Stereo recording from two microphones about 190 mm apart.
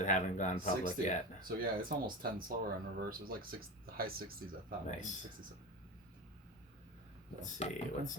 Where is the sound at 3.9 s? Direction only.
50° right (ahead or behind).